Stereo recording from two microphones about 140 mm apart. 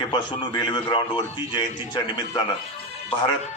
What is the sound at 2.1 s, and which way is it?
Speech, 30° left (ahead or behind).